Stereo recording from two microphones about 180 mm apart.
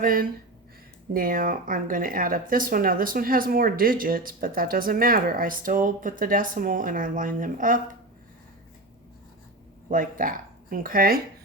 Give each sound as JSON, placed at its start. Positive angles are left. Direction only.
{"t": 0.0, "sound": "speech", "side_deg": -50}
{"t": 9.9, "sound": "speech", "side_deg": -50}